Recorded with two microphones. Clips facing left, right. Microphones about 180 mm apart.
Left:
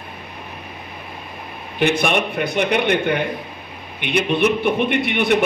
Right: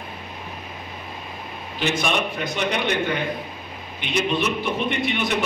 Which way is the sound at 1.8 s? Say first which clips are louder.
Left 5 dB; 60° left (ahead or behind).